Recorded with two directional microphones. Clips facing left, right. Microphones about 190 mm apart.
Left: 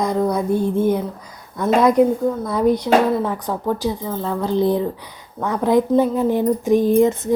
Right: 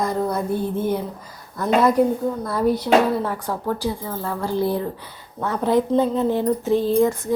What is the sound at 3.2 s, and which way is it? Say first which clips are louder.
Speech: left 3 dB; 15° left (ahead or behind).